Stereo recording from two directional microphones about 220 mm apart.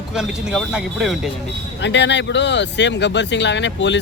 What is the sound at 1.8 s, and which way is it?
Speech, 55° left (ahead or behind).